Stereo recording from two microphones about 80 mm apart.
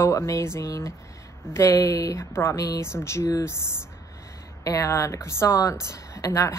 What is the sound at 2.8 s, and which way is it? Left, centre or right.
Speech, left.